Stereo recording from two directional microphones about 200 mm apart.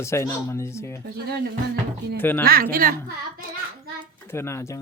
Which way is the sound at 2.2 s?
10° left (ahead or behind).